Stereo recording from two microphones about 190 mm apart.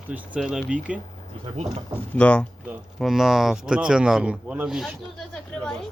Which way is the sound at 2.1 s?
5° left (ahead or behind).